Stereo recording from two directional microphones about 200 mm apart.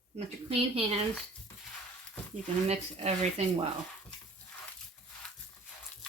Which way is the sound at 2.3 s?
30° right (ahead or behind).